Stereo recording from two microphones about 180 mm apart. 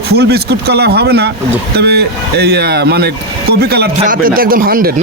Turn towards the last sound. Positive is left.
turn(degrees=-55)  # may be behind; listen again after turning